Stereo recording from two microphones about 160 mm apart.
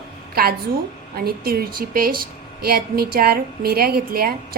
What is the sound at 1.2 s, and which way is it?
A woman's voice, 75° right (ahead or behind).